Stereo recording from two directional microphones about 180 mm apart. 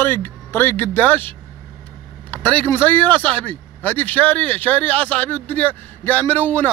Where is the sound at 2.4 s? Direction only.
10° left (ahead or behind).